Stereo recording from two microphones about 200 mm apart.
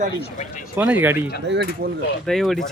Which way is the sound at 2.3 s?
Centre (ahead or behind).